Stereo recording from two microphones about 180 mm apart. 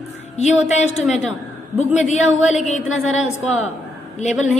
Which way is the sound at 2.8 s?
90° left.